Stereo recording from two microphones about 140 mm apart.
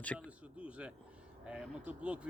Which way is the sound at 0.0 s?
10° left (ahead or behind).